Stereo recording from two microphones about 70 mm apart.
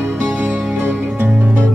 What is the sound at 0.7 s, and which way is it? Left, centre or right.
Music, right.